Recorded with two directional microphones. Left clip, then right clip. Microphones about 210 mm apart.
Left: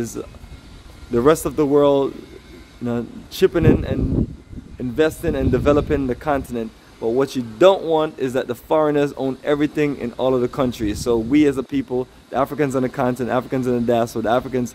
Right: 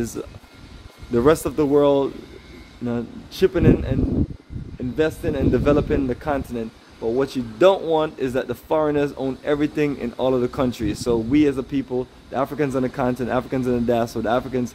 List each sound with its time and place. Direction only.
0.2 s speech: 5° left (ahead or behind); by 14.7 s 20° left (ahead or behind)